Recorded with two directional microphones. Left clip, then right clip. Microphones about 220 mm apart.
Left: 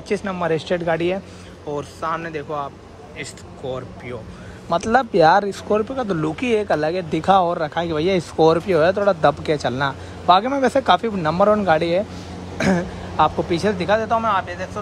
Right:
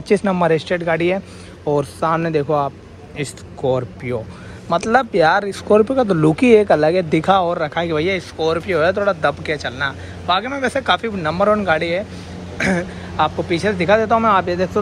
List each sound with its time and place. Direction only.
0.1 s a man's voice: 5° left (ahead or behind)